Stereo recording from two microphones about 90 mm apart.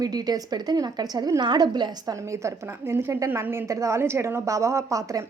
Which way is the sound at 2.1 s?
35° right (ahead or behind).